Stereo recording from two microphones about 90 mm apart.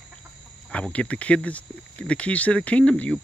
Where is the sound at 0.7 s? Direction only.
15° left (ahead or behind).